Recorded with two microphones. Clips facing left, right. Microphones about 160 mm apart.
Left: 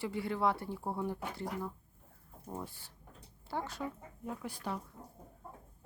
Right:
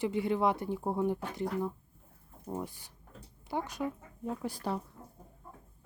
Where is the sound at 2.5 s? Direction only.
15° right (ahead or behind).